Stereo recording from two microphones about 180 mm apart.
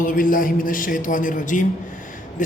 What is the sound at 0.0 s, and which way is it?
A man's voice, 50° left (ahead or behind).